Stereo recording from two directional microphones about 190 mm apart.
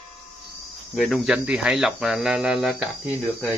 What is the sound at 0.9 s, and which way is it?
Speech, centre (ahead or behind).